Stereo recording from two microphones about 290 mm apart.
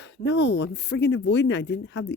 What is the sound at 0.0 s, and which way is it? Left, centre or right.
Speech, left.